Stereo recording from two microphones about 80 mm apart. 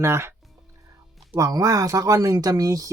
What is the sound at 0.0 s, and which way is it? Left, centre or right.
Speech, right.